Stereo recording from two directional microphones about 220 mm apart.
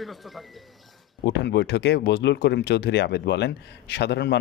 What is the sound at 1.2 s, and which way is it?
Speech, 50° left (ahead or behind).